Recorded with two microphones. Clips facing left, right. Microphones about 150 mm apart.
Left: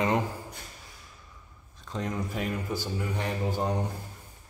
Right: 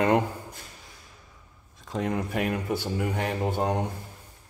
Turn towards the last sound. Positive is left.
turn(degrees=-65)  # may be behind; listen again after turning